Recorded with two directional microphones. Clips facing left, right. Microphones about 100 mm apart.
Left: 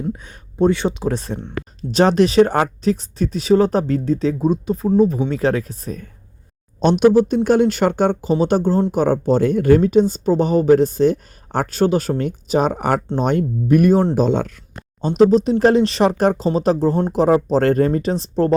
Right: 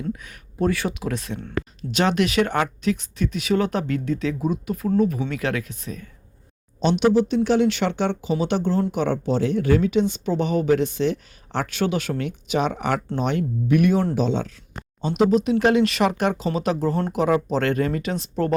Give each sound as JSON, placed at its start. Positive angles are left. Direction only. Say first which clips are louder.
{"t": 0.1, "sound": "speech", "louder": "left 3 dB", "side_deg": 30}
{"t": 15.3, "sound": "speech", "louder": "left 4 dB", "side_deg": 35}